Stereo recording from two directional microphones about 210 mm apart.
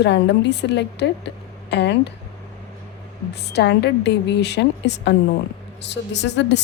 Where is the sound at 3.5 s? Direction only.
55° left (ahead or behind).